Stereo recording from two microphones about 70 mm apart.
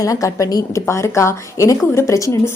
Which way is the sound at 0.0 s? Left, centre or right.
Left.